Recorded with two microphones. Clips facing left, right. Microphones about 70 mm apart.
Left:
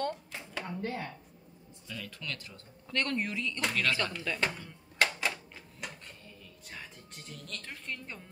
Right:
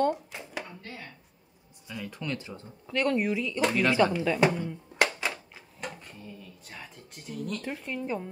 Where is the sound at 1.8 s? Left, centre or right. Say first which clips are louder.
Right 6 dB; centre.